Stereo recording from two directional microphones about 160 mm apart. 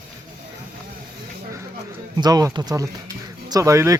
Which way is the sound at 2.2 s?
25° right (ahead or behind).